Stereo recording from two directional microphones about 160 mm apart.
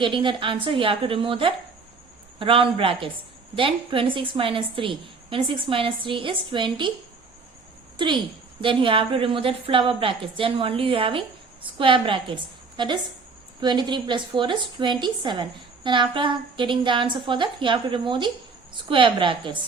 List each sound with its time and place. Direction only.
0.0 s a woman's voice: 30° right (ahead or behind)
7.9 s a woman's voice: 30° right (ahead or behind)